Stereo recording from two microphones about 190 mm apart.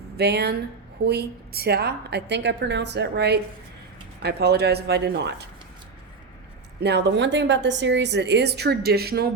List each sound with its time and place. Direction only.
0.2 s a woman's voice: 60° right (ahead or behind)
6.8 s a woman's voice: 65° right (ahead or behind)